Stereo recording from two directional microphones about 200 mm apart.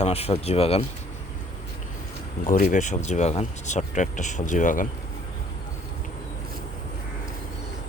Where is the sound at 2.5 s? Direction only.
40° left (ahead or behind).